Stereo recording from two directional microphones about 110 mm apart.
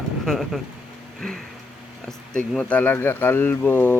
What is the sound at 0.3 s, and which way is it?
Speech, centre (ahead or behind).